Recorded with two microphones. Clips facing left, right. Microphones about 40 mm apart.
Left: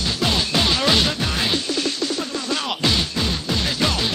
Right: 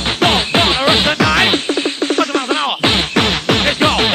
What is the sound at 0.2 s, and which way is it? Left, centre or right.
Music, right.